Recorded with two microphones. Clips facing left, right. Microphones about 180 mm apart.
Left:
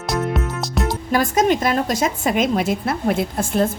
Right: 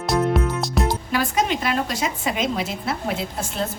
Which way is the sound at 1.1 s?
45° left (ahead or behind).